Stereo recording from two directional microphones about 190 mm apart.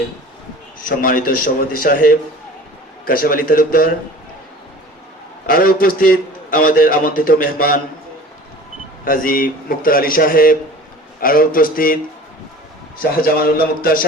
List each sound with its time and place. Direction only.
0.9 s a man's voice: 50° left (ahead or behind)
5.5 s a man's voice: 50° left (ahead or behind)
9.0 s a man's voice: 50° left (ahead or behind)
13.0 s a man's voice: 50° left (ahead or behind)